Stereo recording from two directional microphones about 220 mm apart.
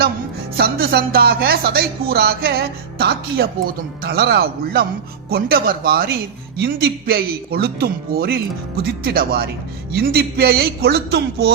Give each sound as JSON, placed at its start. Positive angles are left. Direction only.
{"t": 0.5, "sound": "speech", "side_deg": -45}